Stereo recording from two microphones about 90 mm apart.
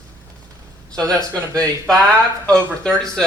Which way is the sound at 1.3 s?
10° left (ahead or behind).